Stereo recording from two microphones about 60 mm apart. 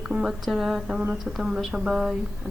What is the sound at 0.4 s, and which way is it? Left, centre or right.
A woman's voice, centre.